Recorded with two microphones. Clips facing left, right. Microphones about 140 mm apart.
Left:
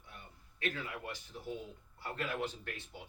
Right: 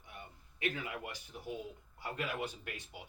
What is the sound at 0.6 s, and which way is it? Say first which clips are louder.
Speech: right 1 dB; 15° right (ahead or behind).